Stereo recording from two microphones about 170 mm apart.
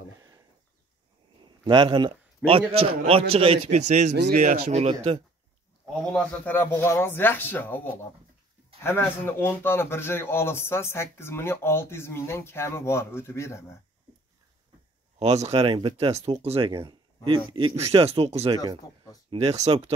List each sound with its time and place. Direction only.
1.6 s a man's voice: 30° right (ahead or behind)
4.1 s speech: 90° right
4.4 s a man's voice: 45° right (ahead or behind)
6.1 s a man's voice: 10° left (ahead or behind)
15.1 s a man's voice: 40° right (ahead or behind)